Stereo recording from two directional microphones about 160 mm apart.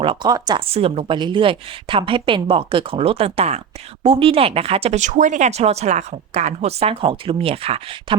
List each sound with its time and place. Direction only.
0.0 s speech: 30° right (ahead or behind)